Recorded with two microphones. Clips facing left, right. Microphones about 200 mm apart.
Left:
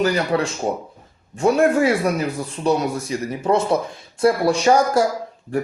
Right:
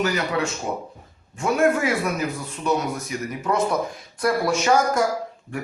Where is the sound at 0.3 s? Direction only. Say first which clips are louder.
Left 4 dB; 35° left (ahead or behind).